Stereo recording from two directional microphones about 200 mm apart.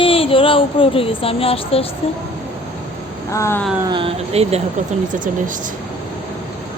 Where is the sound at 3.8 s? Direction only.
25° right (ahead or behind); by 5.7 s 40° right (ahead or behind).